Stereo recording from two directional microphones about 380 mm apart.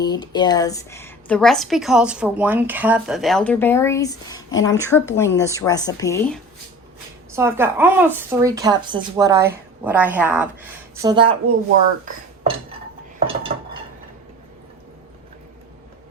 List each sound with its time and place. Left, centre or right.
0.0 s speech: centre
7.3 s a woman's voice: centre
12.1 s dishes: right